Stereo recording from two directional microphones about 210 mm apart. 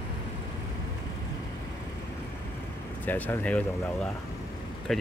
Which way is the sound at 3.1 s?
10° left (ahead or behind).